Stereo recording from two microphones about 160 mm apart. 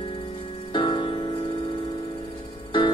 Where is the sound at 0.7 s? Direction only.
30° left (ahead or behind).